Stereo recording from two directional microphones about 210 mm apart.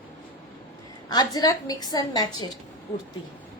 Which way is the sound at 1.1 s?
20° left (ahead or behind).